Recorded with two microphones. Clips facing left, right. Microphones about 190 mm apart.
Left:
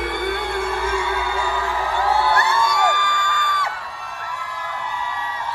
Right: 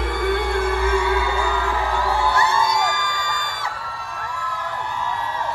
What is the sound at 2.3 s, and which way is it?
Music, 60° left (ahead or behind).